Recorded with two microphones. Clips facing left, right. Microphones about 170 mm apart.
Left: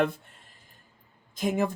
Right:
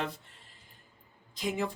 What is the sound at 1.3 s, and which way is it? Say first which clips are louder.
Speech: left 6 dB; 50° left (ahead or behind).